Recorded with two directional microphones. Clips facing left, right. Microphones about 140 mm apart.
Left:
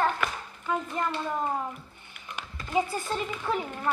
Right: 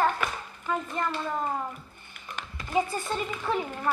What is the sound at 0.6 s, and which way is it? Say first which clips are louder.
Speech: even; 10° left (ahead or behind).